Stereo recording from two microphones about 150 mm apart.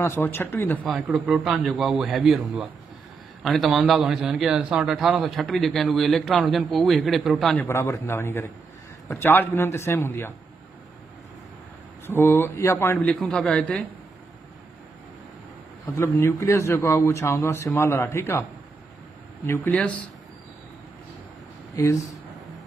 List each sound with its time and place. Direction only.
0.0 s speech: 15° left (ahead or behind)
0.8 s a man's voice: 10° right (ahead or behind)
7.6 s speech: 20° left (ahead or behind)
12.1 s speech: 15° left (ahead or behind)
16.0 s speech: 15° left (ahead or behind)
19.4 s speech: 15° left (ahead or behind)
21.8 s speech: 20° left (ahead or behind)